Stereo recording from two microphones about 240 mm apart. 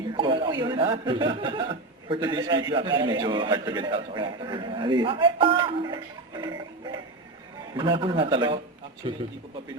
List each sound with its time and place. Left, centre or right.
0.2 s speech: centre